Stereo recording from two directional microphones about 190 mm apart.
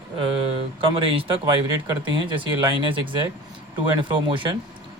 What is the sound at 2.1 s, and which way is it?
Speech, 25° right (ahead or behind).